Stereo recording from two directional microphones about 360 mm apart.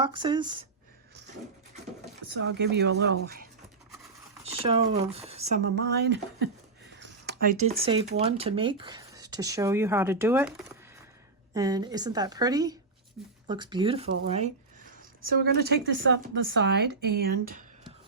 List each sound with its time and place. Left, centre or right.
0.0 s a woman's voice: centre
2.3 s speech: right
4.4 s a woman's voice: centre
5.7 s a woman's voice: right